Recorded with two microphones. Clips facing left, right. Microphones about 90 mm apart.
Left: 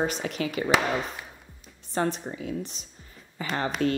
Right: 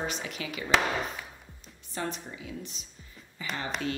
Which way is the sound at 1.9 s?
45° left (ahead or behind).